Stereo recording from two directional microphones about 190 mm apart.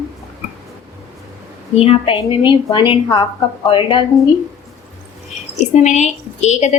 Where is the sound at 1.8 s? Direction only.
30° left (ahead or behind).